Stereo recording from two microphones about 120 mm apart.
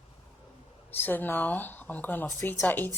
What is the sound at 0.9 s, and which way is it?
Speech, 15° left (ahead or behind).